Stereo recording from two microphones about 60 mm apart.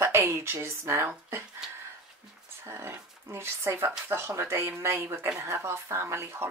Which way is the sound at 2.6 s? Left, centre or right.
Right.